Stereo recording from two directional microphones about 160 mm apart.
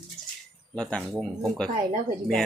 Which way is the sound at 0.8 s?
5° left (ahead or behind).